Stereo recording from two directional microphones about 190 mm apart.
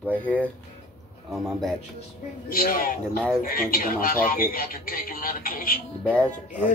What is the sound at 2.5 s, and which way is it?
Speech, 50° left (ahead or behind).